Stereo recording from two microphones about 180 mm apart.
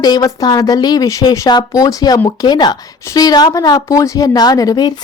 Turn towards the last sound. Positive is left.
turn(degrees=20)  # may be behind; listen again after turning